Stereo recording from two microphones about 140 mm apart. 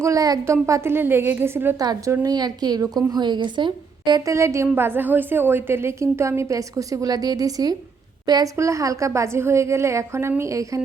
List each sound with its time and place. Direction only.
0.0 s a woman's voice: 25° right (ahead or behind)
1.8 s a woman's voice: 30° right (ahead or behind)